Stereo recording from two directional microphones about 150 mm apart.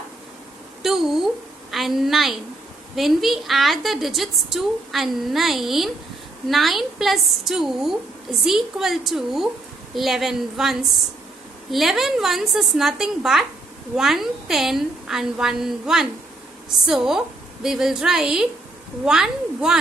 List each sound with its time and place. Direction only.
0.8 s a woman's voice: centre (ahead or behind)